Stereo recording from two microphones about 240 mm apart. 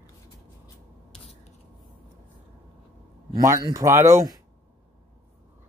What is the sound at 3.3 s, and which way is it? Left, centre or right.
Speech, centre.